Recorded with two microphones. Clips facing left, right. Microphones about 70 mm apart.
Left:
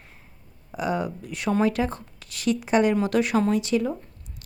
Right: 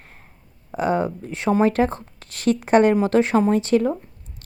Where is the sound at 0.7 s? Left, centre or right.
Right.